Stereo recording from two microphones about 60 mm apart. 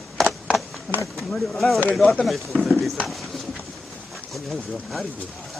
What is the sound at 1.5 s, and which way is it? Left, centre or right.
Speech, centre.